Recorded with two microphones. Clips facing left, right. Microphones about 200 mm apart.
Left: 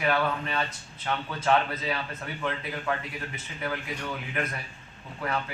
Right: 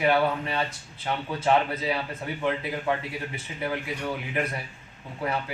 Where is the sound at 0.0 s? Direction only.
20° right (ahead or behind).